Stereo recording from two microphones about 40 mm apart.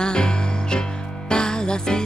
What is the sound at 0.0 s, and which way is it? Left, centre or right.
Music, left.